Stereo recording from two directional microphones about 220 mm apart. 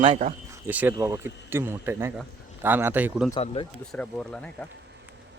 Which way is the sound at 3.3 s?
25° left (ahead or behind).